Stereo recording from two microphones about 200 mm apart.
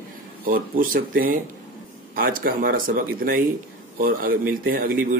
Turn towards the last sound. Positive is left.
turn(degrees=-45)  # may be behind; listen again after turning